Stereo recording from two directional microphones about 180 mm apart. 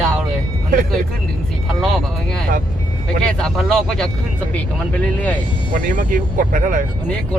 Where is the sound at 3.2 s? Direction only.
5° left (ahead or behind).